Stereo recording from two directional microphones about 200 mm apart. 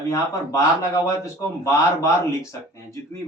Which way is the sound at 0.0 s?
15° left (ahead or behind).